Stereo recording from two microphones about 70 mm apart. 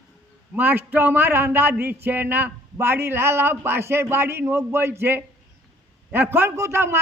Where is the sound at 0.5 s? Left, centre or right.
Right.